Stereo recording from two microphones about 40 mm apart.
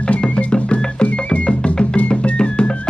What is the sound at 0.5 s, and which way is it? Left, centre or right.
Music, left.